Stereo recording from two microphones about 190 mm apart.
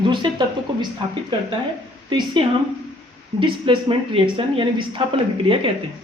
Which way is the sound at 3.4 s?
25° right (ahead or behind).